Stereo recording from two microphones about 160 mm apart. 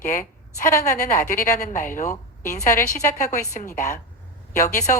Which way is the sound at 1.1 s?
55° left (ahead or behind).